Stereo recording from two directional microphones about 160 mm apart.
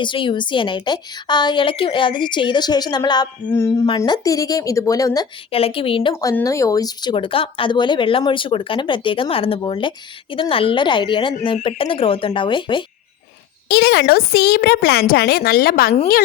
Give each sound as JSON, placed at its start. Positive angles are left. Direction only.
{"t": 0.0, "sound": "a woman's voice", "side_deg": 30}
{"t": 3.8, "sound": "a woman's voice", "side_deg": 30}
{"t": 5.5, "sound": "speech", "side_deg": 35}
{"t": 6.1, "sound": "speech", "side_deg": 20}
{"t": 13.7, "sound": "a woman's voice", "side_deg": 90}